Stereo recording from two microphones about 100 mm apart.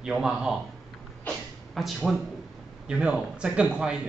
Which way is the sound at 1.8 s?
Centre (ahead or behind).